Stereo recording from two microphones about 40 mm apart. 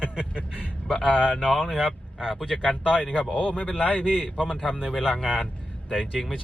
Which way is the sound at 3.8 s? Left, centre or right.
Left.